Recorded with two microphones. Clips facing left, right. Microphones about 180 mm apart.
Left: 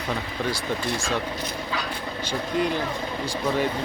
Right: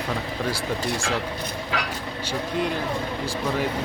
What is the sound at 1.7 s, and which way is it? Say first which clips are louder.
Vehicle: right 3 dB; 85° right.